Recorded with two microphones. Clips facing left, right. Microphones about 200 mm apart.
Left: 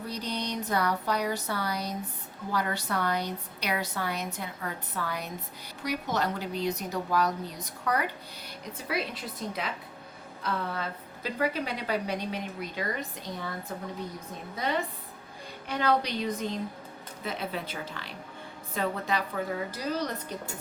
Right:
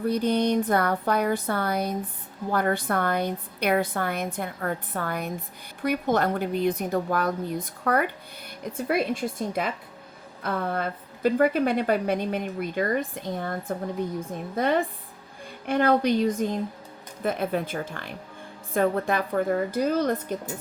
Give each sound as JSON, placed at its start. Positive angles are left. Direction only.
{"t": 0.0, "sound": "a woman's voice", "side_deg": -55}